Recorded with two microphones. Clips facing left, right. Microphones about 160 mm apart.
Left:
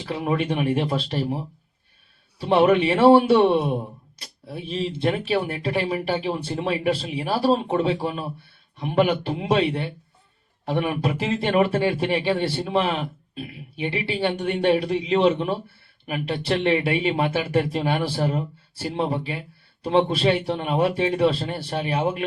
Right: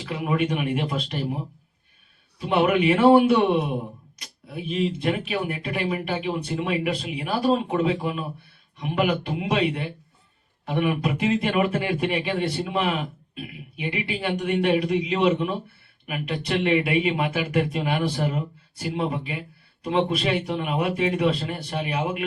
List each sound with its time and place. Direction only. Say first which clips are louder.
0.0 s speech: even; 35° left (ahead or behind)
2.4 s speech: left 3 dB; 30° left (ahead or behind)